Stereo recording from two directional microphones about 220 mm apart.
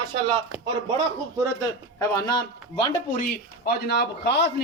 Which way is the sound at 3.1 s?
40° left (ahead or behind).